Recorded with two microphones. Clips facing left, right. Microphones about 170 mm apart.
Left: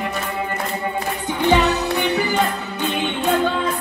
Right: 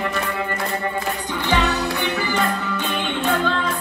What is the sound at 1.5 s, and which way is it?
Music, 20° left (ahead or behind).